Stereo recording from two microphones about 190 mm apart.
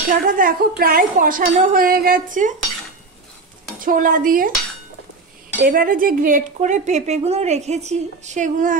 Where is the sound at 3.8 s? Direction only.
45° right (ahead or behind).